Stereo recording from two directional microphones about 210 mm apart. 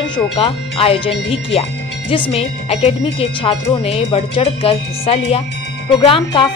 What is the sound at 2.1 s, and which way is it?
Speech, 25° left (ahead or behind).